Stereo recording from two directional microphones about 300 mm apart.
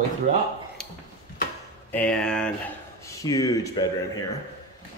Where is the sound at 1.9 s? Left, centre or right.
Centre.